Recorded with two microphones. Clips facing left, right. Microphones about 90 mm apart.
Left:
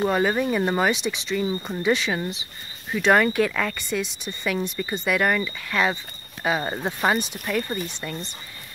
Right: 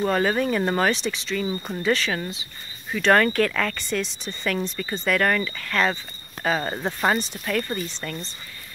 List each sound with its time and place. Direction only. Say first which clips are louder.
0.0 s speech: even; 10° left (ahead or behind)